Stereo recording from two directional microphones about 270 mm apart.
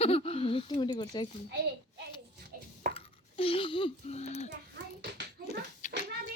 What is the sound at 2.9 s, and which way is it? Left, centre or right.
A child's voice, left.